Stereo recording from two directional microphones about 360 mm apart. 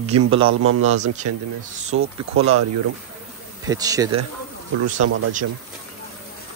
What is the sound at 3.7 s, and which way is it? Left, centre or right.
Speech, centre.